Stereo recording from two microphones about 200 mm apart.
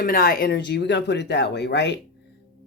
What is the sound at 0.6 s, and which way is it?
Speech, 60° left (ahead or behind).